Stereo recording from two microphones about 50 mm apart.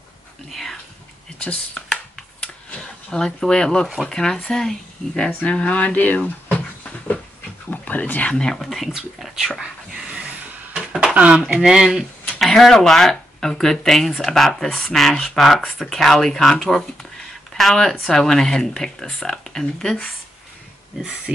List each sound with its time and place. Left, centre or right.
0.5 s whispering: centre
1.4 s speech: centre
2.1 s a sound: centre
4.1 s speech: centre
5.4 s speech: left
7.7 s speech: left
8.3 s speech: centre
8.5 s speech: centre
8.9 s speech: centre
9.6 s a sound: centre
11.1 s speech: right
11.6 s speech: centre
12.0 s speech: centre
20.9 s speech: centre